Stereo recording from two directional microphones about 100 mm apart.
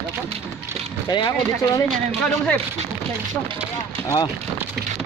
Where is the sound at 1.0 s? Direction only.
45° left (ahead or behind).